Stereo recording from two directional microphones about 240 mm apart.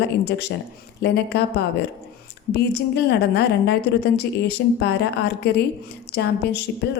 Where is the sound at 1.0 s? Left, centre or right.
Left.